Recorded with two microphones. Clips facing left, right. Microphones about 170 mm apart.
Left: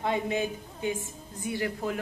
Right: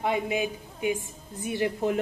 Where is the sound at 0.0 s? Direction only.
15° right (ahead or behind).